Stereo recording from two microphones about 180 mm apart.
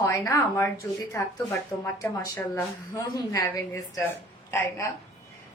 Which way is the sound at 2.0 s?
20° left (ahead or behind).